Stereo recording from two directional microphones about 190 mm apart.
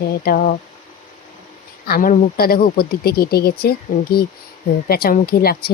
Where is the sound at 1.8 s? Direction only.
50° left (ahead or behind).